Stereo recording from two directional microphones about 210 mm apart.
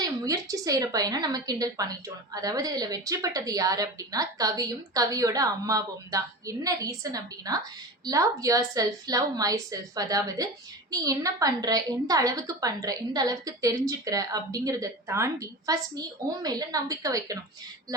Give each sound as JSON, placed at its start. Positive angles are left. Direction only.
{"t": 0.0, "sound": "a woman's voice", "side_deg": -15}